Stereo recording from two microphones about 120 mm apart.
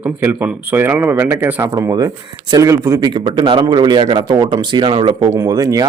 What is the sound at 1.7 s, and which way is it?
A man's voice, 35° right (ahead or behind).